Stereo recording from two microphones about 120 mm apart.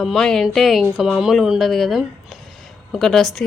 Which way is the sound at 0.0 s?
Centre (ahead or behind).